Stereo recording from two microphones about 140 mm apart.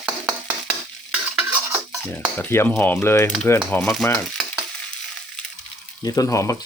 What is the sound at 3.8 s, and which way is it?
Stir, centre (ahead or behind).